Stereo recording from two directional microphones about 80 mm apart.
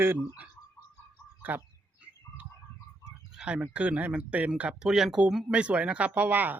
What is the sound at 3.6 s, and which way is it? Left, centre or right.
Speech, centre.